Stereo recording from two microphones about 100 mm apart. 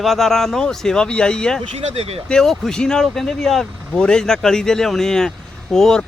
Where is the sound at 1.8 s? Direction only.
85° right.